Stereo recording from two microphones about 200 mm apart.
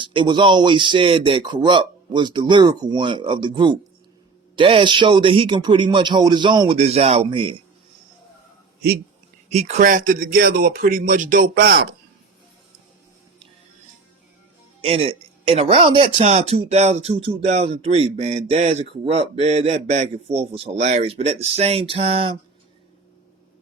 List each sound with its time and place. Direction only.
0.0 s speech: 25° right (ahead or behind)
9.5 s speech: 35° right (ahead or behind); by 11.9 s 55° right (ahead or behind)
14.8 s speech: 30° right (ahead or behind)